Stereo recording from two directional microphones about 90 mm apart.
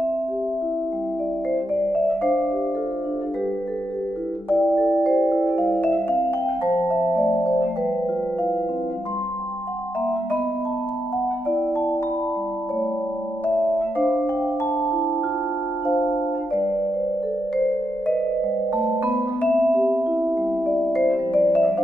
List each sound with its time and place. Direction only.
1.5 s music: 5° left (ahead or behind)
4.8 s music: 5° left (ahead or behind)
5.4 s music: 20° left (ahead or behind)
7.2 s music: 10° left (ahead or behind)
19.9 s music: 20° right (ahead or behind)
20.6 s music: 5° left (ahead or behind)